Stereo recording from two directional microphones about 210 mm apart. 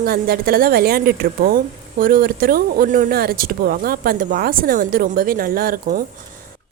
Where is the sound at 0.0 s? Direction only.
45° right (ahead or behind).